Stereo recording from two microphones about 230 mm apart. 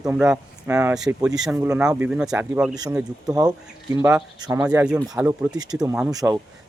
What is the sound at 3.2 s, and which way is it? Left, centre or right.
Speech, centre.